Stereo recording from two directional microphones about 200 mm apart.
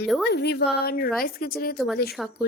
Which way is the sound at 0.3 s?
55° left (ahead or behind).